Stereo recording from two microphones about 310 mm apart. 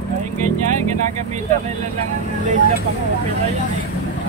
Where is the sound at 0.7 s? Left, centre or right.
Right.